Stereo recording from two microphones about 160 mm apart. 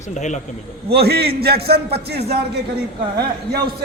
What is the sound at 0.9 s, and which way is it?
Speech, 85° right.